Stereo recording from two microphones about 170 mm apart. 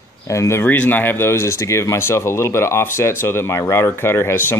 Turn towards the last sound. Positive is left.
turn(degrees=15)  # may be behind; listen again after turning